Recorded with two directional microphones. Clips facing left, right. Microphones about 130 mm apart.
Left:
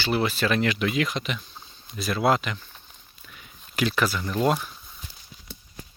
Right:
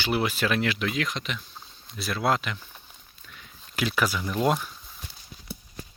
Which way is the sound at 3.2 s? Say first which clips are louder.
Left 1 dB; 5° left (ahead or behind).